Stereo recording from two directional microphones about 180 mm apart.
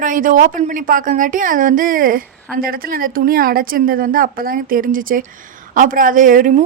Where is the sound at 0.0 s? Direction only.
45° right (ahead or behind).